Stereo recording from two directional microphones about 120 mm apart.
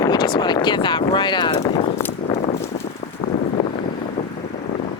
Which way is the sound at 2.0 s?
20° left (ahead or behind).